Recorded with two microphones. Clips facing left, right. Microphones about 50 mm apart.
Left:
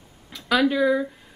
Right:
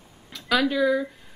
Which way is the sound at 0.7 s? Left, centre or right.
Centre.